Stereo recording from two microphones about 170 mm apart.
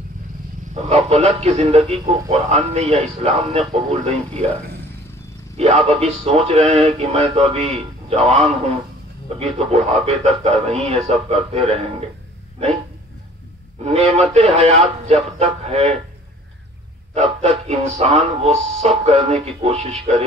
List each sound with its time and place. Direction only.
0.8 s music: 40° right (ahead or behind)
5.6 s music: 40° right (ahead or behind)
9.4 s music: 35° right (ahead or behind)
13.8 s music: 40° right (ahead or behind)
17.1 s music: 40° right (ahead or behind)